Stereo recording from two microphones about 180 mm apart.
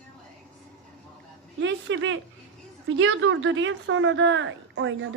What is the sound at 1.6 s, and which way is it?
A woman's voice, 90° right.